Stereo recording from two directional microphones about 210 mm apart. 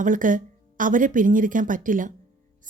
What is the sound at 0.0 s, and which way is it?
Speech, 40° right (ahead or behind).